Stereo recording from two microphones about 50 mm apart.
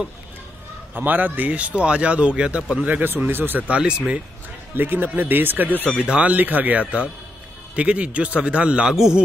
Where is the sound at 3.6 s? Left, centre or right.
Right.